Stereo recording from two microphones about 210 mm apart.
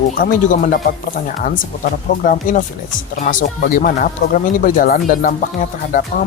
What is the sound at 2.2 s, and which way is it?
Speech, 40° left (ahead or behind).